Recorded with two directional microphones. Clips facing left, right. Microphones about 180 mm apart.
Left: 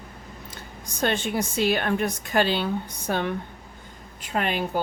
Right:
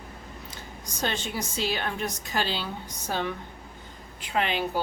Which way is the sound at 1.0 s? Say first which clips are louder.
Left 6 dB; 55° left (ahead or behind).